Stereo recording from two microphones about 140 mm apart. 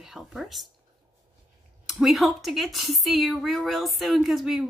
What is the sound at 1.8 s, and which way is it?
A woman's voice, centre (ahead or behind).